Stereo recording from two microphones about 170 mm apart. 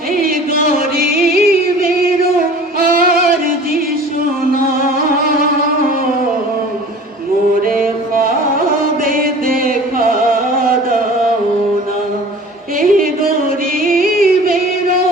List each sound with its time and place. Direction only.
0.1 s a sound: 60° right (ahead or behind)
0.8 s music: 60° right (ahead or behind)
7.6 s carnatic music: 55° right (ahead or behind)
9.0 s music: 55° right (ahead or behind)
12.8 s music: 55° right (ahead or behind)